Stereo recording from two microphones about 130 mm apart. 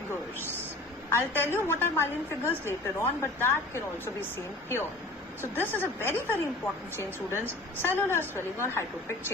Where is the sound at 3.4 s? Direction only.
15° left (ahead or behind).